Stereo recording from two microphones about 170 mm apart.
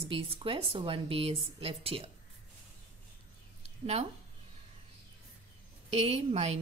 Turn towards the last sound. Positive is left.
turn(degrees=-40)  # may be behind; listen again after turning